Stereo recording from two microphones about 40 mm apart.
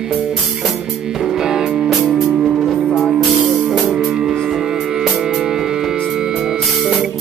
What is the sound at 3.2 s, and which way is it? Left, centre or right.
Music, centre.